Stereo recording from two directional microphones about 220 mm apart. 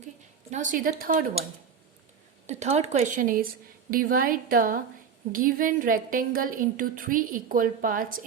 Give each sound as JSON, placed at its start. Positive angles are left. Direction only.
{"t": 0.5, "sound": "a woman's voice", "side_deg": -35}
{"t": 2.5, "sound": "a woman's voice", "side_deg": -30}